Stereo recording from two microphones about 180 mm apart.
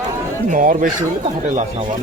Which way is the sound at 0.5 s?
50° right (ahead or behind).